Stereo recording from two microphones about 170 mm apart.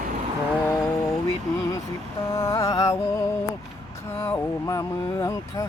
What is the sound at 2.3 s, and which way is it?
Speech, 20° left (ahead or behind).